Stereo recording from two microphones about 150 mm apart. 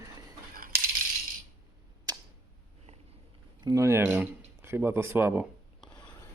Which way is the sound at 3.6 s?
20° right (ahead or behind).